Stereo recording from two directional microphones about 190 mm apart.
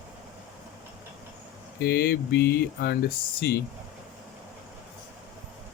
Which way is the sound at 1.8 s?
55° left (ahead or behind).